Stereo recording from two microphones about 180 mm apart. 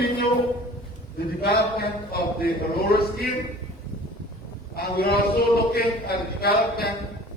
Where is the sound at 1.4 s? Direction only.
60° left (ahead or behind).